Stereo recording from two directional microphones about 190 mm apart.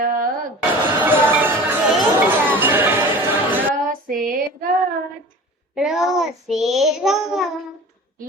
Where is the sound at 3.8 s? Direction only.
45° right (ahead or behind).